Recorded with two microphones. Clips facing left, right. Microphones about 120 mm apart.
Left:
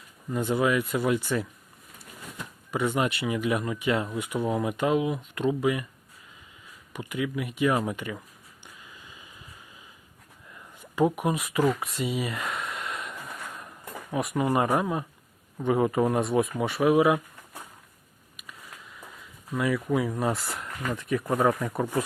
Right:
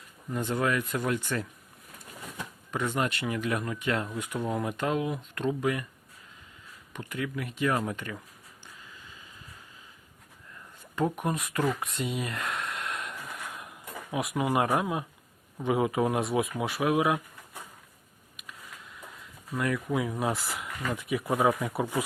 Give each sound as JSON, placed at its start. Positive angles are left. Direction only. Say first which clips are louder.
{"t": 0.3, "sound": "speech", "louder": "left 4 dB", "side_deg": 5}
{"t": 2.7, "sound": "speech", "louder": "left 3 dB", "side_deg": 10}
{"t": 6.9, "sound": "speech", "louder": "left 4 dB", "side_deg": 10}
{"t": 8.6, "sound": "a sound", "louder": "left 1 dB", "side_deg": 15}
{"t": 10.9, "sound": "a sound", "louder": "left 4 dB", "side_deg": 10}
{"t": 14.8, "sound": "speech", "louder": "left 2 dB", "side_deg": -5}
{"t": 18.3, "sound": "speech", "louder": "left 1 dB", "side_deg": 0}